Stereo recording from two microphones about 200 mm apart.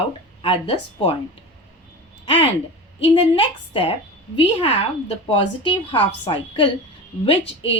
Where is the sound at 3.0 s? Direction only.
25° left (ahead or behind).